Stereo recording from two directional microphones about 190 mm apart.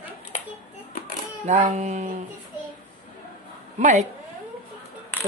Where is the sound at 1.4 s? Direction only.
40° right (ahead or behind).